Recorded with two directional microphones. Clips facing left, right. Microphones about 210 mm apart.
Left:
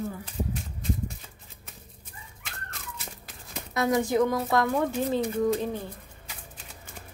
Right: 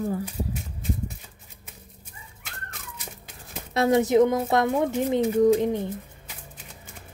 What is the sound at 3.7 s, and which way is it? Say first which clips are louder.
Speech: right 5 dB; 25° right (ahead or behind).